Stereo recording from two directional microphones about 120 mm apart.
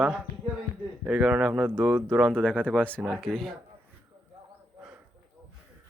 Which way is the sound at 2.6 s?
10° left (ahead or behind).